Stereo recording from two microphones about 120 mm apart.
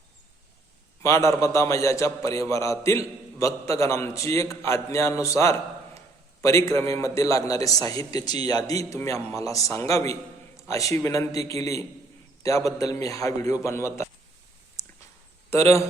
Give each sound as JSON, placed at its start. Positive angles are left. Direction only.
{"t": 1.0, "sound": "a man's voice", "side_deg": 25}
{"t": 15.4, "sound": "speech", "side_deg": 25}